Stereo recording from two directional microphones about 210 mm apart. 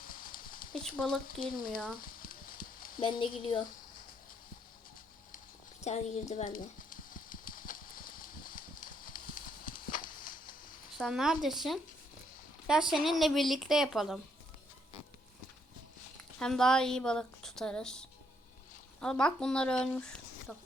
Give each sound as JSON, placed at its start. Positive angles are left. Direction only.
{"t": 0.0, "sound": "clip-clop", "side_deg": 40}
{"t": 0.7, "sound": "speech", "side_deg": 5}
{"t": 2.0, "sound": "frying", "side_deg": 40}
{"t": 3.0, "sound": "speech", "side_deg": 25}
{"t": 5.8, "sound": "a sound", "side_deg": 30}
{"t": 10.9, "sound": "speech", "side_deg": 0}
{"t": 16.4, "sound": "speech", "side_deg": 5}